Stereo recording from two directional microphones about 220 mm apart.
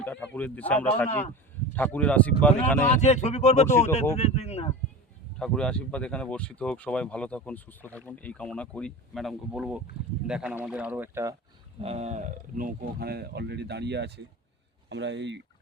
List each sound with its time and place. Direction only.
0.0 s speech: 5° left (ahead or behind)
3.0 s speech: 30° left (ahead or behind)
5.4 s speech: 5° left (ahead or behind); by 11.3 s 15° right (ahead or behind)
11.8 s speech: 30° right (ahead or behind); by 15.4 s 55° right (ahead or behind)